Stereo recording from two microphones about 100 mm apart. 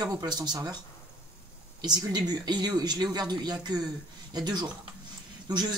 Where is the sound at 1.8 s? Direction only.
45° right (ahead or behind).